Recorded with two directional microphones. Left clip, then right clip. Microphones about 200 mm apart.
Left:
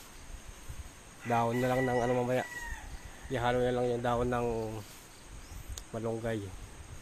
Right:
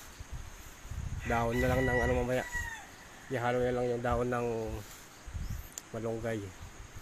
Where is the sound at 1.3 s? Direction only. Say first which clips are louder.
Left 1 dB; centre (ahead or behind).